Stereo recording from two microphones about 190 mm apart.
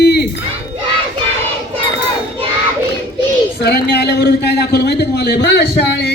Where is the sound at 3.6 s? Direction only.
60° left (ahead or behind).